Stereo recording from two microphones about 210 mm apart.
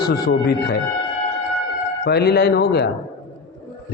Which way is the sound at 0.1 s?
50° left (ahead or behind).